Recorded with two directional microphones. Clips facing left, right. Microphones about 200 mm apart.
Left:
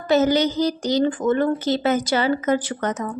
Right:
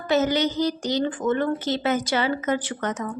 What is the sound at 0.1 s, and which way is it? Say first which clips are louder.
A woman's voice: left 4 dB; 35° left (ahead or behind).